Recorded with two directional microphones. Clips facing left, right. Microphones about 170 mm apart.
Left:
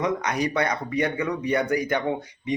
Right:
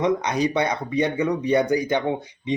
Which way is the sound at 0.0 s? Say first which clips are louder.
Right 3 dB; 25° right (ahead or behind).